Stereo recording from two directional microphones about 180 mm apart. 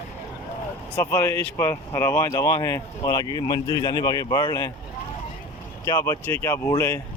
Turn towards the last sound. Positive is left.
turn(degrees=20)  # may be behind; listen again after turning